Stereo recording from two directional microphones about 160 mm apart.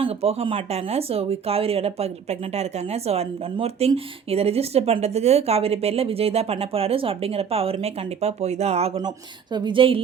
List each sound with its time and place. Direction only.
0.0 s speech: 40° right (ahead or behind)
9.0 s speech: 25° right (ahead or behind)